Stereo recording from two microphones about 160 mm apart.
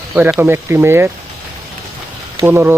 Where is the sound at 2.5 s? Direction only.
15° right (ahead or behind).